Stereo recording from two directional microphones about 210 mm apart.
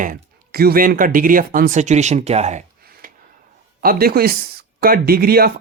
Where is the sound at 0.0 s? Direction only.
45° right (ahead or behind).